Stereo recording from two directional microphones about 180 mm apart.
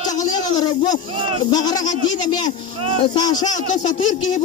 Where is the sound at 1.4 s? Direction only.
20° left (ahead or behind).